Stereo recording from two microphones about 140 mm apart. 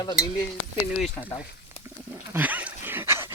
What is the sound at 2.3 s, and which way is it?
Dog, 10° right (ahead or behind).